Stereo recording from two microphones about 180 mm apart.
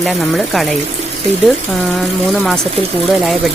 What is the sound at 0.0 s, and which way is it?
Speech, centre (ahead or behind).